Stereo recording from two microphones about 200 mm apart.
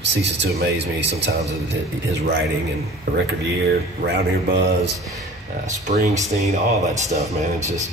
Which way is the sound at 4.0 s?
55° right (ahead or behind).